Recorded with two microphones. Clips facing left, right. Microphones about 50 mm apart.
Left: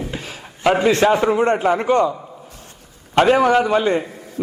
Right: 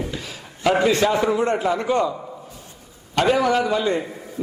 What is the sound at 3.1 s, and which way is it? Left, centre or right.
Speech, left.